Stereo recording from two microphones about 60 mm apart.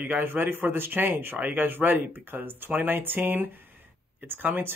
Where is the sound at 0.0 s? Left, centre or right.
Right.